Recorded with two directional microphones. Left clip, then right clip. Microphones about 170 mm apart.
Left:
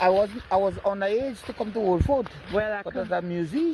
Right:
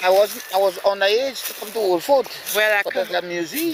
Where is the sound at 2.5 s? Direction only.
10° right (ahead or behind).